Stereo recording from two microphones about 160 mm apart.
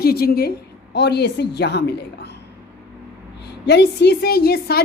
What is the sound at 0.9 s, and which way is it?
A woman's voice, 90° left.